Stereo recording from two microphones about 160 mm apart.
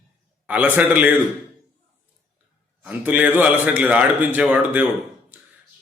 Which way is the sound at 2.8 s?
10° right (ahead or behind).